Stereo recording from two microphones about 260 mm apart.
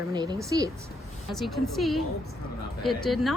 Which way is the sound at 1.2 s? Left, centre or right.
Centre.